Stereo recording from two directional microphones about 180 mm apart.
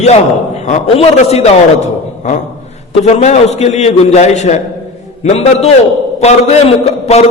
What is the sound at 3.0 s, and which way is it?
A man's voice, 40° left (ahead or behind).